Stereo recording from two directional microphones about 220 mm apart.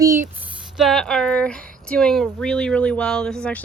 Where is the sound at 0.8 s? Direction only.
Centre (ahead or behind).